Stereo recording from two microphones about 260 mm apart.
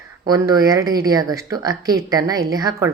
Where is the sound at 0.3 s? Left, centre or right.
Centre.